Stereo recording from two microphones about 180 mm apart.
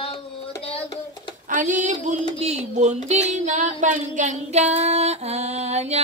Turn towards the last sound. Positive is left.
turn(degrees=-35)  # may be behind; listen again after turning